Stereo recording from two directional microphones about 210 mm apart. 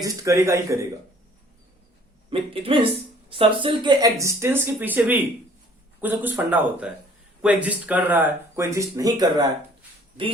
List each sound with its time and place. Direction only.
0.0 s speech: 15° right (ahead or behind)
2.3 s speech: 25° right (ahead or behind)